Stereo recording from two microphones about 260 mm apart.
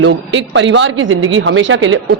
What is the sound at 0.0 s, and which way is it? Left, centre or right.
Speech, right.